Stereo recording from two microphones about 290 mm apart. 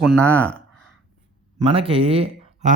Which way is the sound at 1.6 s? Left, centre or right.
Centre.